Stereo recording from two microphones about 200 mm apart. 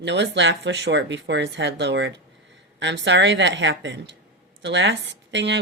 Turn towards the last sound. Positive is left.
turn(degrees=-65)  # may be behind; listen again after turning